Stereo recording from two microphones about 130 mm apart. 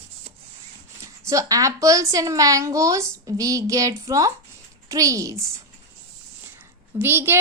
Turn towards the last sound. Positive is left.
turn(degrees=-20)  # may be behind; listen again after turning